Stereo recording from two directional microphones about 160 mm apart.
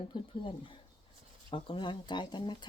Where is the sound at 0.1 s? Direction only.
30° left (ahead or behind).